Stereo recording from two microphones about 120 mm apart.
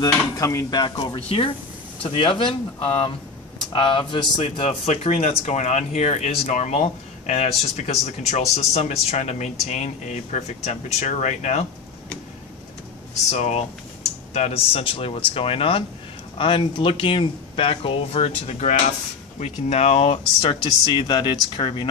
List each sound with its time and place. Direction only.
0.0 s speech: 30° left (ahead or behind)
4.4 s speech: 60° left (ahead or behind)
13.3 s speech: 65° left (ahead or behind); by 21.8 s 40° left (ahead or behind)